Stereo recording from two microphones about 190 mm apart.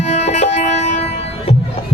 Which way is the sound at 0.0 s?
35° left (ahead or behind).